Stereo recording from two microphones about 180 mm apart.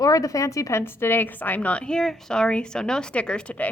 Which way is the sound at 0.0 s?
20° left (ahead or behind).